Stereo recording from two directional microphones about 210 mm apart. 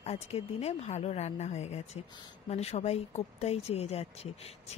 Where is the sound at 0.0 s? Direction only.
30° left (ahead or behind).